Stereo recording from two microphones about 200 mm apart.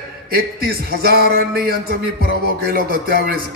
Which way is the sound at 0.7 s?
50° right (ahead or behind).